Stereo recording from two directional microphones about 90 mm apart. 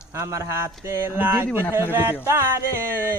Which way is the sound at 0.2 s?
35° right (ahead or behind).